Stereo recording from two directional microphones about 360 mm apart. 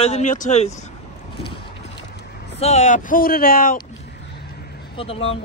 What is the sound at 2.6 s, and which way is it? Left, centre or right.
Speech, centre.